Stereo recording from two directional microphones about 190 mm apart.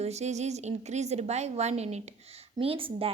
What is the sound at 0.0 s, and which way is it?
A woman's voice, 35° right (ahead or behind).